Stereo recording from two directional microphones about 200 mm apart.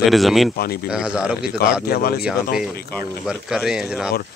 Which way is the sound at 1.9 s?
50° left (ahead or behind).